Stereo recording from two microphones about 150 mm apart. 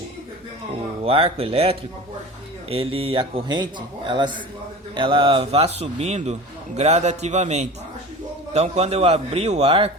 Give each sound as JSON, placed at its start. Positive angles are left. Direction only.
{"t": 1.0, "sound": "a man's voice", "side_deg": -40}